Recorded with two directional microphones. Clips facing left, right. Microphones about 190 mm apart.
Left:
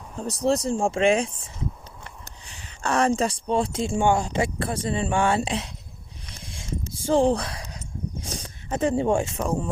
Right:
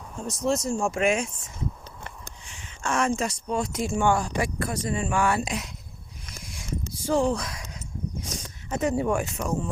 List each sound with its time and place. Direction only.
0.2 s speech: 35° left (ahead or behind)
2.5 s speech: 35° left (ahead or behind)
6.2 s a sound: 30° left (ahead or behind)
8.2 s speech: 30° left (ahead or behind)